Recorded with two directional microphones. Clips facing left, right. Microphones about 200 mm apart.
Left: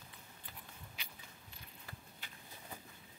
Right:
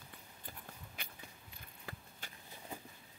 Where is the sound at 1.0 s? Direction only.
55° right (ahead or behind).